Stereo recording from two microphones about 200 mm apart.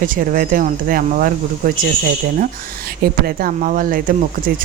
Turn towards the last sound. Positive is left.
turn(degrees=-45)  # may be behind; listen again after turning